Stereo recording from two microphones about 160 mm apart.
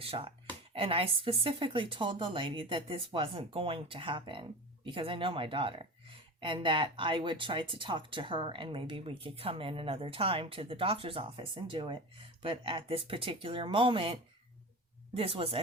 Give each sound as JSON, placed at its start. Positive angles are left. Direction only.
{"t": 0.0, "sound": "speech", "side_deg": -35}